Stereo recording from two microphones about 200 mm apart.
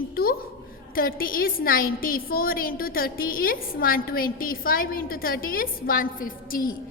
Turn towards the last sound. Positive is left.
turn(degrees=45)  # may be behind; listen again after turning